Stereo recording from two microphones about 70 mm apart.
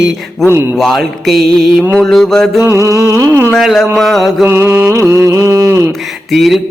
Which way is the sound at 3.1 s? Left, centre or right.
Right.